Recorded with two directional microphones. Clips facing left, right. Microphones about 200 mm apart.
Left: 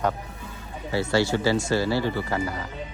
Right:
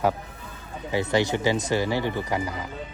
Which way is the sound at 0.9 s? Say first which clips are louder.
Even; 15° right (ahead or behind).